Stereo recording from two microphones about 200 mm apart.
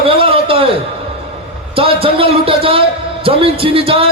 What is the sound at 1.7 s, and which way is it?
A man's voice, 25° right (ahead or behind).